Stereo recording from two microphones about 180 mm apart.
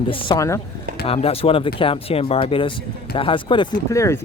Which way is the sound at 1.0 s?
30° left (ahead or behind).